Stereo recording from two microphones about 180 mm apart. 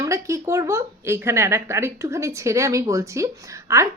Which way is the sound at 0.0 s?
15° right (ahead or behind).